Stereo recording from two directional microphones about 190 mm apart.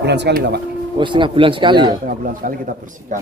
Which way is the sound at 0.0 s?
65° right (ahead or behind).